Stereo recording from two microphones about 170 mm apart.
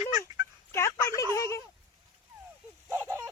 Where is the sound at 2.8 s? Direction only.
15° right (ahead or behind).